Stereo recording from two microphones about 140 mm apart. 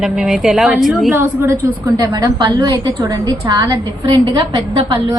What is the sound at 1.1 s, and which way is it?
Speech, 20° right (ahead or behind).